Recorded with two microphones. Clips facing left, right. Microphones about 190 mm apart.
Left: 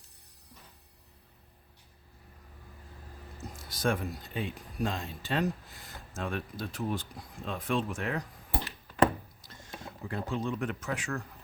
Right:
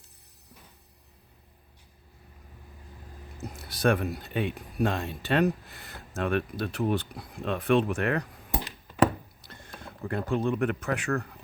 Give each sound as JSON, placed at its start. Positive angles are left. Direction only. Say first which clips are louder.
{"t": 3.4, "sound": "speech", "louder": "right 6 dB", "side_deg": -65}
{"t": 8.4, "sound": "a sound", "louder": "right 3 dB", "side_deg": -15}
{"t": 9.4, "sound": "rowboat", "louder": "right 3 dB", "side_deg": -60}
{"t": 9.8, "sound": "speech", "louder": "right 5 dB", "side_deg": -60}